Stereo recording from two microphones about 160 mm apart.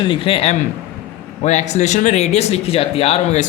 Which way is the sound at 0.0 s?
30° left (ahead or behind).